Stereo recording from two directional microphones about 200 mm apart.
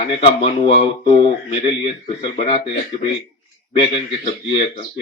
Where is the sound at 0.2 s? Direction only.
25° left (ahead or behind).